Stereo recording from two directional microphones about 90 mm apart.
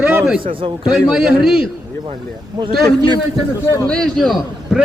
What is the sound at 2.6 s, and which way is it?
Speech, 55° right (ahead or behind).